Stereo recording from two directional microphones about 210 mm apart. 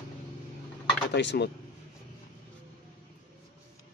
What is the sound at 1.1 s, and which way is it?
Speech, 55° left (ahead or behind).